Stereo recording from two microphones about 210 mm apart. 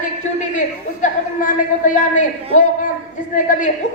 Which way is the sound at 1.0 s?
35° left (ahead or behind).